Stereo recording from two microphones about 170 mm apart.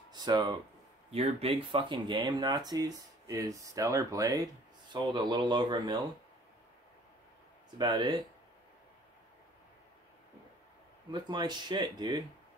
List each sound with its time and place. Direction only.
0.1 s speech: 25° right (ahead or behind)
1.1 s speech: 35° right (ahead or behind)
7.7 s speech: 25° right (ahead or behind)
11.1 s speech: 25° right (ahead or behind)